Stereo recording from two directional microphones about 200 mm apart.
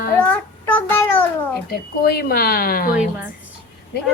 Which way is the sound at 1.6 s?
50° left (ahead or behind).